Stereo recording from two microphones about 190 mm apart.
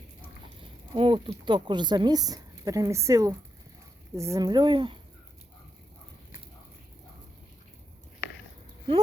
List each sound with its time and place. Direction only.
0.9 s speech: 25° right (ahead or behind)